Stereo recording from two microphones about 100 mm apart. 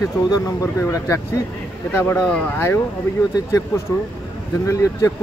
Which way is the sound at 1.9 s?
25° left (ahead or behind).